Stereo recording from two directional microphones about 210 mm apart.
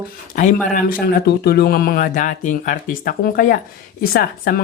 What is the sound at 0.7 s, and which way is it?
Speech, 40° left (ahead or behind).